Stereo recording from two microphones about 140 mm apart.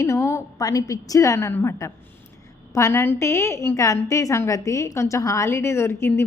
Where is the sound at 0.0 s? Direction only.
20° left (ahead or behind).